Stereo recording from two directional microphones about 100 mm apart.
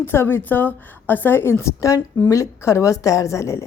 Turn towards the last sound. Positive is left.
turn(degrees=30)  # may be behind; listen again after turning